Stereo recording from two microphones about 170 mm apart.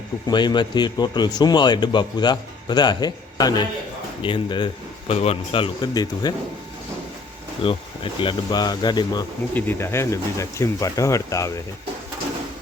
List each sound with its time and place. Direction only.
0.3 s speech: 25° left (ahead or behind)
7.6 s speech: 30° left (ahead or behind)
9.6 s speech: 15° left (ahead or behind)